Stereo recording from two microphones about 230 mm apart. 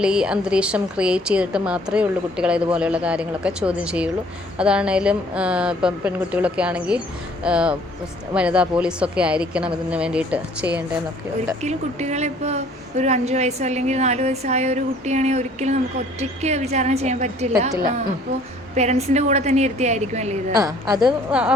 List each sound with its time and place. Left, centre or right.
0.0 s a woman's voice: centre
11.6 s a woman's voice: right
20.5 s a woman's voice: centre
21.2 s a woman's voice: centre